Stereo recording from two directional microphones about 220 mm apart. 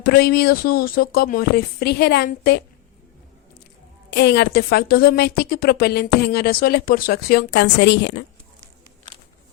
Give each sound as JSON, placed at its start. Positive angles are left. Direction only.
{"t": 0.0, "sound": "a woman's voice", "side_deg": 45}
{"t": 4.1, "sound": "a woman's voice", "side_deg": 50}